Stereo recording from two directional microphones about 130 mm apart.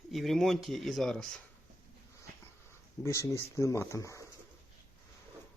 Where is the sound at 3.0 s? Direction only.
20° left (ahead or behind).